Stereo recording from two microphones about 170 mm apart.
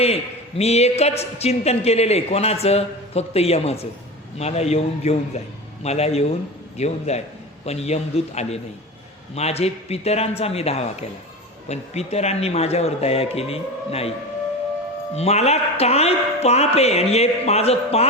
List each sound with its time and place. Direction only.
0.6 s a woman's voice: 40° left (ahead or behind)
15.1 s a woman's voice: 40° left (ahead or behind)